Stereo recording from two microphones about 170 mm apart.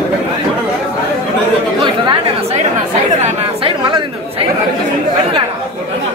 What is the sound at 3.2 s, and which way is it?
Chatter, 30° right (ahead or behind).